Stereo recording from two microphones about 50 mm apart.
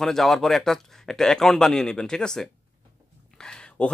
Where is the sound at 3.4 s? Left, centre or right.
Centre.